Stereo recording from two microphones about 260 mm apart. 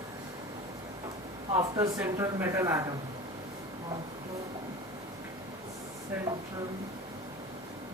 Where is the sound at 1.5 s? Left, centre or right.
Centre.